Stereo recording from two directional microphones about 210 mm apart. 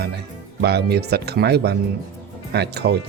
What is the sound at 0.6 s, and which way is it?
Speech, 50° right (ahead or behind).